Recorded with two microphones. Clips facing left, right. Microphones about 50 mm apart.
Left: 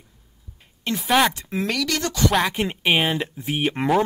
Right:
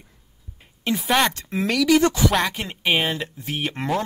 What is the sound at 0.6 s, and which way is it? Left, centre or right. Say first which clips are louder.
Speech: right 2 dB; centre.